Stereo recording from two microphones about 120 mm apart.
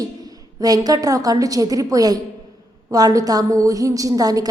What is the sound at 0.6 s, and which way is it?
A woman's voice, 30° right (ahead or behind).